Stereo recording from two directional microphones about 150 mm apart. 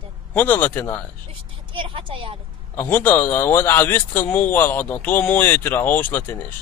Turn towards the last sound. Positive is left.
turn(degrees=15)  # may be behind; listen again after turning